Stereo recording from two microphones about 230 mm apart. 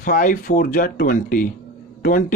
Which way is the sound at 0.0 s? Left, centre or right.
Left.